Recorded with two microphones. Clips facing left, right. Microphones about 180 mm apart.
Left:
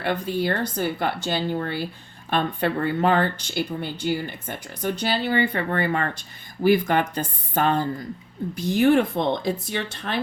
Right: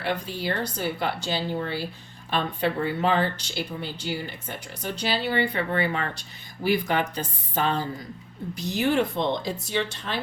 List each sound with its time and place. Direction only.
0.0 s speech: 55° left (ahead or behind)